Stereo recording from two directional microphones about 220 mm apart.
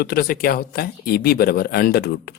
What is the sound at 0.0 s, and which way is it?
Speech, 45° left (ahead or behind).